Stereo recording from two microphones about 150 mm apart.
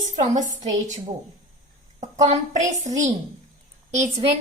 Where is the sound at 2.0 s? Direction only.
50° right (ahead or behind).